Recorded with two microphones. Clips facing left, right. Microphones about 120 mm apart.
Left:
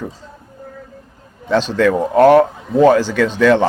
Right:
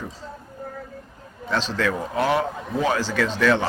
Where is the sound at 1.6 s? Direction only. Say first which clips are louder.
Left 10 dB; 60° left (ahead or behind).